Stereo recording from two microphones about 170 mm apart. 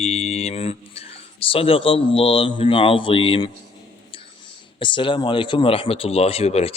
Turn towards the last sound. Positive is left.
turn(degrees=35)  # may be behind; listen again after turning